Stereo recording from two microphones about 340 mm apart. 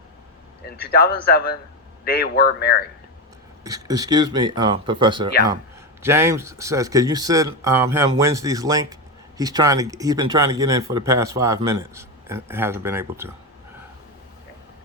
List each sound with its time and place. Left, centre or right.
0.8 s a man's voice: left
3.6 s speech: centre